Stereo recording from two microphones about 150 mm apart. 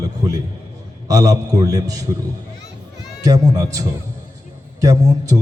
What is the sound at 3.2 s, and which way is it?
A man's voice, 25° right (ahead or behind).